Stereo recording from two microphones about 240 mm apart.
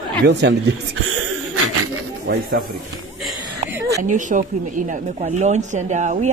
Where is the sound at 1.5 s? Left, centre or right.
Right.